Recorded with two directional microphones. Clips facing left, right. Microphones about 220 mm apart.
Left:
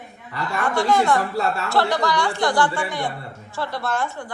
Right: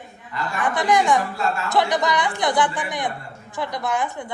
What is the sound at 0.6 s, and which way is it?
A woman's voice, 20° right (ahead or behind).